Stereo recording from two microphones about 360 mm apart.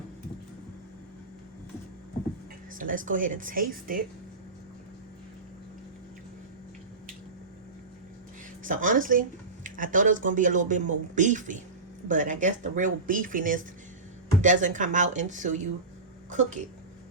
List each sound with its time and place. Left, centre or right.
2.7 s speech: right
8.6 s speech: right